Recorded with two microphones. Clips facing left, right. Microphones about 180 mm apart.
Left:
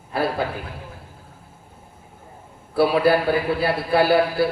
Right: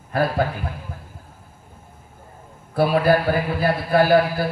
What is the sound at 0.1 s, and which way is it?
Speech, 45° right (ahead or behind).